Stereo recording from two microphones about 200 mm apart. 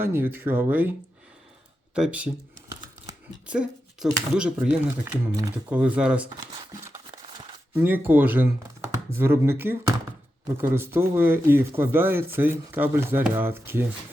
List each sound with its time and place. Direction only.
0.0 s speech: 10° right (ahead or behind)
2.0 s speech: 5° right (ahead or behind)
3.4 s speech: 5° right (ahead or behind)
5.4 s speech: 15° right (ahead or behind)
5.7 s speech: 5° right (ahead or behind)
7.1 s a sound: 25° right (ahead or behind)
7.7 s speech: 10° right (ahead or behind)